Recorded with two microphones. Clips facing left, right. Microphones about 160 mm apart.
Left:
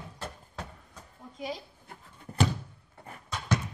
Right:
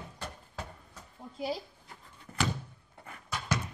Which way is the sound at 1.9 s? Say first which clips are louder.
Left 4 dB; 55° left (ahead or behind).